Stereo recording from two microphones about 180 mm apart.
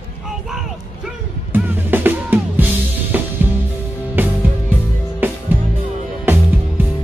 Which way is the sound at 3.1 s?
10° right (ahead or behind).